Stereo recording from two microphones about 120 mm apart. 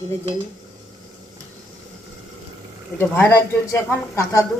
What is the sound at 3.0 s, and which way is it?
A man's voice, 20° left (ahead or behind).